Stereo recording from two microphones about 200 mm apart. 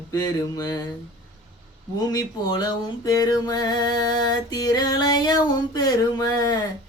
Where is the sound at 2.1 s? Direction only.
20° left (ahead or behind).